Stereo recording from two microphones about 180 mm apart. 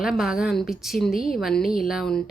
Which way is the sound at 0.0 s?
Centre (ahead or behind).